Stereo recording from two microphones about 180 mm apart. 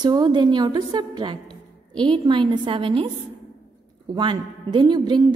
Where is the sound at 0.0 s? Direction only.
25° right (ahead or behind).